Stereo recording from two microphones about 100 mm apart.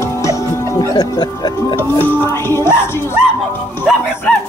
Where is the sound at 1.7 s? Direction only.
20° left (ahead or behind).